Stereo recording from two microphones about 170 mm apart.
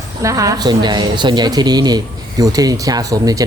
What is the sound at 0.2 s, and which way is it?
Speech, 20° right (ahead or behind).